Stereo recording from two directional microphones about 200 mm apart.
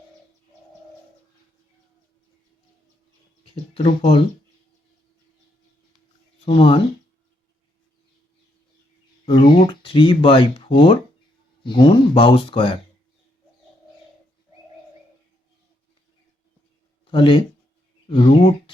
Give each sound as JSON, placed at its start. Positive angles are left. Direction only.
{"t": 3.4, "sound": "speech", "side_deg": 30}
{"t": 6.4, "sound": "speech", "side_deg": 25}
{"t": 9.2, "sound": "speech", "side_deg": 25}
{"t": 17.1, "sound": "speech", "side_deg": 25}